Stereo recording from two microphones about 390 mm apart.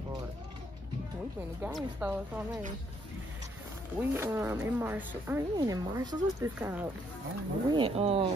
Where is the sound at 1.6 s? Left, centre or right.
Centre.